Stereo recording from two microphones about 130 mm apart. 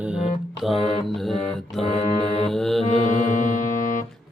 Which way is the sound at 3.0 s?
70° left (ahead or behind).